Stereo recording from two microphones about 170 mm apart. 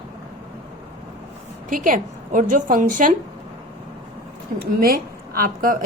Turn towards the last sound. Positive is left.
turn(degrees=-55)  # may be behind; listen again after turning